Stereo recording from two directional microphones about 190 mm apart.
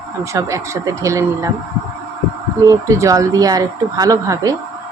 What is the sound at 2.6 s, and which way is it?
Speech, 15° right (ahead or behind).